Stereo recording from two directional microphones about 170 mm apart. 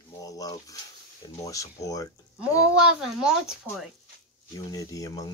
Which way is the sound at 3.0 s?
5° right (ahead or behind).